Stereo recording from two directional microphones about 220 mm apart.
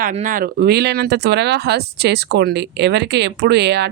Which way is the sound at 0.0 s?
35° right (ahead or behind).